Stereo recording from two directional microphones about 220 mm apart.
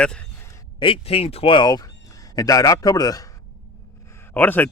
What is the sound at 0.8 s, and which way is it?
Speech, 25° left (ahead or behind).